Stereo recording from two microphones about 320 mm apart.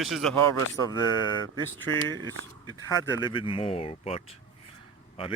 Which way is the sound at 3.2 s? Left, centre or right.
Centre.